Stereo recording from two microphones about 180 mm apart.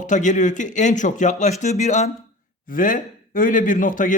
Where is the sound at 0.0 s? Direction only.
45° left (ahead or behind).